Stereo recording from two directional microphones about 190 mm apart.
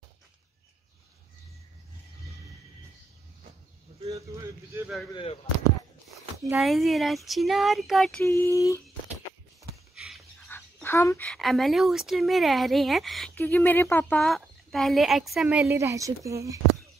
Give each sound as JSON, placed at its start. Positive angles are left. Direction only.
{"t": 4.1, "sound": "speech", "side_deg": -15}
{"t": 5.1, "sound": "speech", "side_deg": 30}
{"t": 6.5, "sound": "speech", "side_deg": 0}
{"t": 8.2, "sound": "a sound", "side_deg": 15}
{"t": 9.9, "sound": "dog", "side_deg": 0}
{"t": 10.5, "sound": "speech", "side_deg": 10}
{"t": 15.6, "sound": "speech", "side_deg": -15}